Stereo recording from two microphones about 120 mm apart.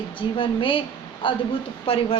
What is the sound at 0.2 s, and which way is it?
A woman's voice, 45° left (ahead or behind).